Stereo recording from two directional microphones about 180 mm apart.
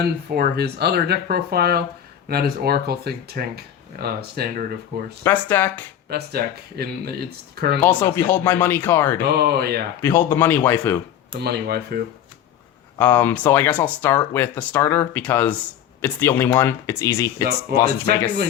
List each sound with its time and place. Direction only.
0.0 s speech: 60° right (ahead or behind)
5.2 s speech: 10° left (ahead or behind)
6.1 s speech: 60° right (ahead or behind)
7.8 s speech: 10° left (ahead or behind)
9.2 s speech: 60° right (ahead or behind)
10.0 s speech: 10° left (ahead or behind)
11.3 s speech: 60° right (ahead or behind)
13.0 s speech: 10° left (ahead or behind)